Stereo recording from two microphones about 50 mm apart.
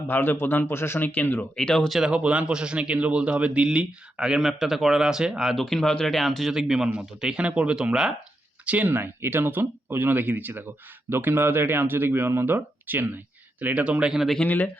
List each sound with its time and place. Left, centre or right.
0.1 s a man's voice: left
0.7 s speech: left
0.9 s speech: left
1.5 s speech: centre
2.0 s a man's voice: centre
5.5 s speech: centre
6.5 s a man's voice: centre
8.6 s speech: right
8.9 s speech: right
14.4 s speech: left